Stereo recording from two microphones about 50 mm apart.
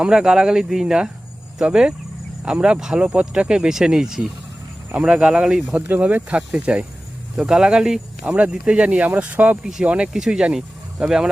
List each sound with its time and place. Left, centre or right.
0.0 s speech: centre
4.9 s speech: right
6.0 s speech: right
6.3 s speech: right
8.3 s speech: right
10.1 s speech: centre